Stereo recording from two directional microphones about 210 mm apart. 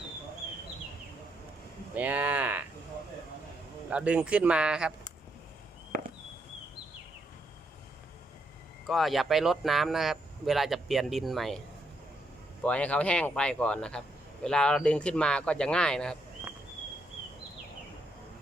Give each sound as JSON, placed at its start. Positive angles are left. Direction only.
{"t": 2.0, "sound": "speech", "side_deg": -10}
{"t": 3.8, "sound": "speech", "side_deg": -5}
{"t": 8.9, "sound": "speech", "side_deg": 0}
{"t": 12.6, "sound": "speech", "side_deg": 5}